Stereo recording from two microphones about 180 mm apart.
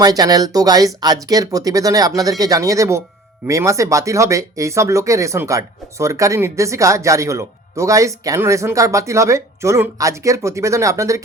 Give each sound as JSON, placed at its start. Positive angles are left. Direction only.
{"t": 0.0, "sound": "speech", "side_deg": -20}